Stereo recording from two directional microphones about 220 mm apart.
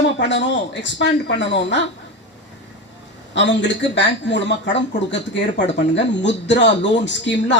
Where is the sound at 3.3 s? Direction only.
55° left (ahead or behind).